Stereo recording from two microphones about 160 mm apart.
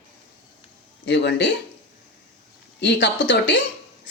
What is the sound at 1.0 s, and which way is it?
Speech, 90° left.